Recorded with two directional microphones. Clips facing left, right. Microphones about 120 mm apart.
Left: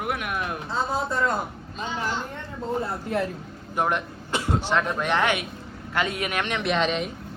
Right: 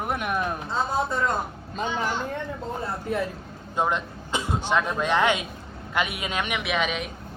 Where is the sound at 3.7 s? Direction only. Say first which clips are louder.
Even; 20° right (ahead or behind).